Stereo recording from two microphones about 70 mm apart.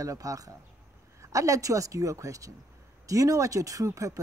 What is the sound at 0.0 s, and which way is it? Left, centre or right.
Speech, right.